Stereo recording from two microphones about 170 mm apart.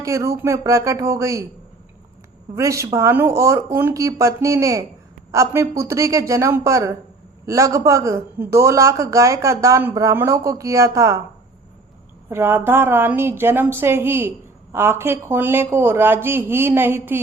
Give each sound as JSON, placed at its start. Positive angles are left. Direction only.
{"t": 0.0, "sound": "a woman's voice", "side_deg": -20}
{"t": 2.6, "sound": "a woman's voice", "side_deg": -15}
{"t": 12.3, "sound": "a woman's voice", "side_deg": -10}